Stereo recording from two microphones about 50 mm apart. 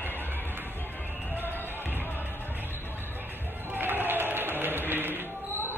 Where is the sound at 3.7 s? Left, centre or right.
Right.